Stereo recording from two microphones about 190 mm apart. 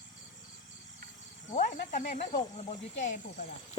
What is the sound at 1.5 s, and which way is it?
Speech, 40° left (ahead or behind).